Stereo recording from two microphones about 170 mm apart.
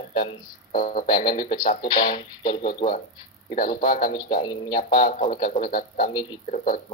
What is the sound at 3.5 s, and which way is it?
Speech, 50° left (ahead or behind).